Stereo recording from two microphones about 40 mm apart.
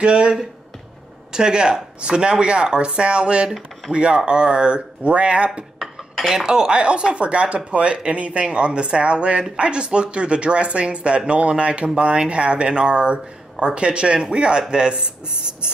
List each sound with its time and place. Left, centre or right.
0.0 s speech: right
6.2 s speech: centre